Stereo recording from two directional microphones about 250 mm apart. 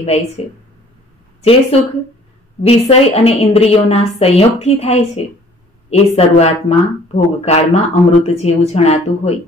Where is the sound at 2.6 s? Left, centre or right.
Left.